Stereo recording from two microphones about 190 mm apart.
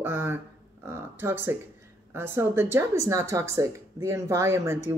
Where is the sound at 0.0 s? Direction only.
10° right (ahead or behind).